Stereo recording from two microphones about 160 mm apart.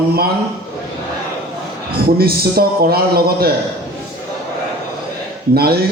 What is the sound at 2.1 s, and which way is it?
A man's voice, 70° right (ahead or behind).